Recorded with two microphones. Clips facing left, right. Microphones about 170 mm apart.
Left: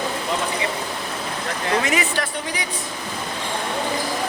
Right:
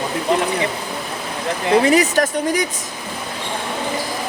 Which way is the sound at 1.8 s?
35° right (ahead or behind).